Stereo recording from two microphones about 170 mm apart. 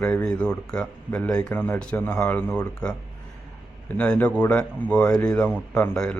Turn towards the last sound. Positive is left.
turn(degrees=5)  # may be behind; listen again after turning